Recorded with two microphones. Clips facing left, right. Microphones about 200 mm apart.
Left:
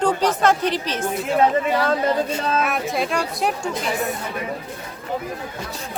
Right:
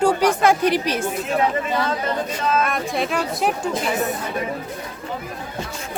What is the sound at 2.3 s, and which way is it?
Speech, 25° left (ahead or behind).